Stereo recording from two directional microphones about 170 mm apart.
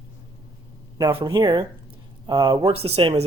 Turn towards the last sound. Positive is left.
turn(degrees=-35)  # may be behind; listen again after turning